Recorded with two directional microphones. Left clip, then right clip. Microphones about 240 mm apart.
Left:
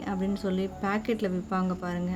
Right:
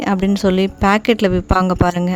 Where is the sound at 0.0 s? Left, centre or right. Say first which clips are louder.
Right 15 dB; right.